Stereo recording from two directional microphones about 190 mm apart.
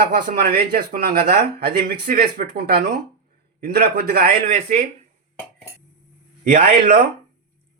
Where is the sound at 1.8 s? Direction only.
55° right (ahead or behind).